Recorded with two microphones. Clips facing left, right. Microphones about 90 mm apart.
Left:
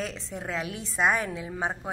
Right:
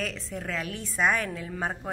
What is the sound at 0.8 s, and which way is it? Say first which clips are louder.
A woman's voice: left 1 dB; 5° left (ahead or behind).